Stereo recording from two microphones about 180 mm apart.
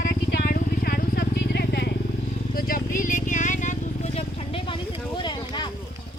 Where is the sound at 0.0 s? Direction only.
60° left (ahead or behind).